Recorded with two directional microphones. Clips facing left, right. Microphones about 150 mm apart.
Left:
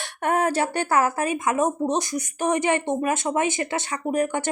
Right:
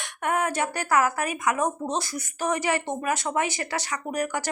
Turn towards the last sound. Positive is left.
turn(degrees=25)  # may be behind; listen again after turning